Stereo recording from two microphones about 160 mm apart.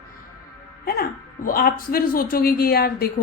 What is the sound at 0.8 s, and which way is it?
Speech, 65° left (ahead or behind).